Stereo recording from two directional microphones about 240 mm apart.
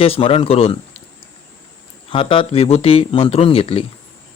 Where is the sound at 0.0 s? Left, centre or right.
Left.